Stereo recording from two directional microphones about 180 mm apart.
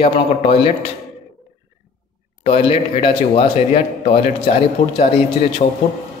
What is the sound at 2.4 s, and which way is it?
Speech, 35° left (ahead or behind).